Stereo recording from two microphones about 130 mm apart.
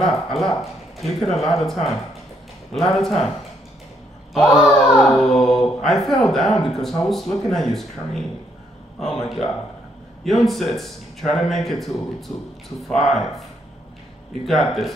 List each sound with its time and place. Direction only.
0.0 s speech: centre (ahead or behind)
4.3 s speech: centre (ahead or behind)
10.2 s speech: centre (ahead or behind)